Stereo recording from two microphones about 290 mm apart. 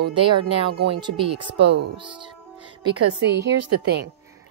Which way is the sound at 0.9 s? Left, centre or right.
Centre.